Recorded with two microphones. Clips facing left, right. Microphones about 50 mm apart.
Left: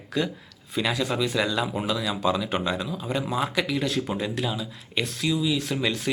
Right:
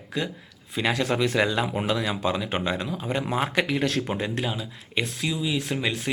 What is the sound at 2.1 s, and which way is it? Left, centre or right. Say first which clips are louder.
Speech: left 1 dB; right.